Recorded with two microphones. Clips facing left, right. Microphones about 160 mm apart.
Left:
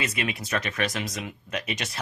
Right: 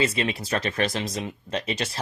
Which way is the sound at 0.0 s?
30° right (ahead or behind).